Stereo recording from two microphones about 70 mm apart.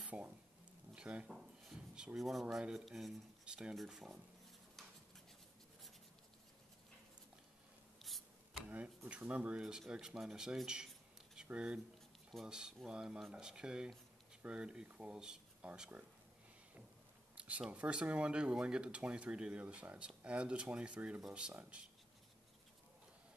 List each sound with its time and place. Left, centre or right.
0.0 s a sound: centre
0.9 s speech: centre
2.1 s speech: centre
3.4 s speech: centre
3.7 s speech: centre
8.6 s speech: right
9.6 s speech: centre
17.4 s speech: centre